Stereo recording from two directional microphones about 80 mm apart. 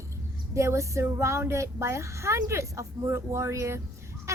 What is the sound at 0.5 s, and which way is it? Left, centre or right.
A woman's voice, right.